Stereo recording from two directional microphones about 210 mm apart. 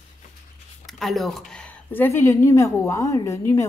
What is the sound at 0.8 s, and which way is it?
A woman's voice, centre (ahead or behind).